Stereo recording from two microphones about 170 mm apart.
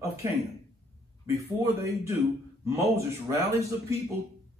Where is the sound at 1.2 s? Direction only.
15° right (ahead or behind).